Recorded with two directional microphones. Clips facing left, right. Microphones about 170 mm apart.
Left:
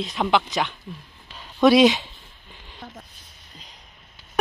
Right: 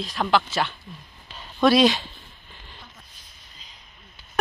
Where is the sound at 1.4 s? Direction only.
20° left (ahead or behind).